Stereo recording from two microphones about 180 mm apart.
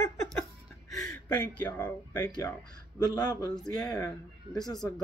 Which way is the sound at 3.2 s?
20° left (ahead or behind).